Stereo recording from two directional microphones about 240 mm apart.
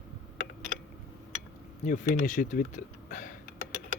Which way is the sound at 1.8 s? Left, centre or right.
Left.